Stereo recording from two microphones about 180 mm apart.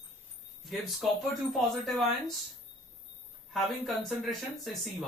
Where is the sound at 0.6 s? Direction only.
Centre (ahead or behind).